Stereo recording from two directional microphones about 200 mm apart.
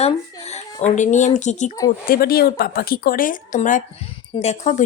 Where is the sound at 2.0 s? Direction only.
50° left (ahead or behind).